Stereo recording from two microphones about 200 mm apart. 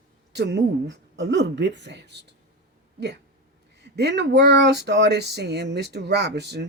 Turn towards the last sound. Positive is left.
turn(degrees=-55)  # may be behind; listen again after turning